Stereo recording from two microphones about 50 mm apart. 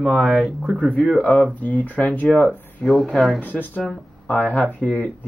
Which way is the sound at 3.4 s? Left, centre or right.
Left.